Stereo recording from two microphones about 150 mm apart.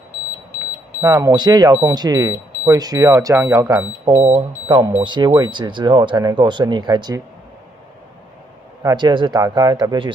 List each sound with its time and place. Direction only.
1.0 s speech: 15° right (ahead or behind)
8.8 s speech: 25° right (ahead or behind)